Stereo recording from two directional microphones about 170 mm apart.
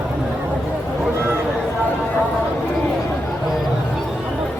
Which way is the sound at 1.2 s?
15° right (ahead or behind).